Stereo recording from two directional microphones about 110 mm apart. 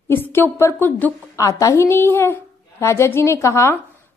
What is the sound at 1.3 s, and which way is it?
A woman's voice, 30° left (ahead or behind).